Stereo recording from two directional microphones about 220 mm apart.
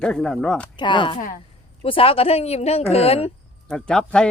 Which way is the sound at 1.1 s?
35° left (ahead or behind).